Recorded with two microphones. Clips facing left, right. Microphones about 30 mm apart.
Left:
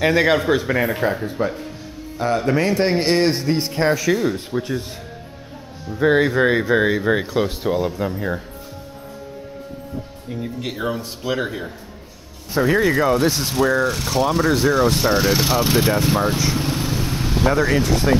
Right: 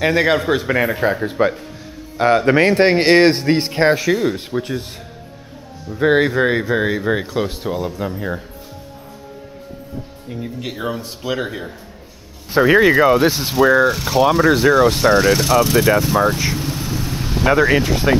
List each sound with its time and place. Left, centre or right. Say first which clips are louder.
0.0 s a man's voice: right 1 dB; centre
1.2 s speech: right 5 dB; right
4.0 s a man's voice: right 2 dB; centre
5.9 s a man's voice: right 2 dB; centre
6.3 s speech: even; centre
10.3 s speech: even; centre
12.5 s a man's voice: right 5 dB; right; by 15.9 s centre
16.5 s vehicle: left 1 dB; centre
17.6 s speech: right 3 dB; right